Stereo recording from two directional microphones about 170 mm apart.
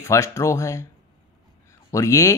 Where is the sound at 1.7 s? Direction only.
20° left (ahead or behind).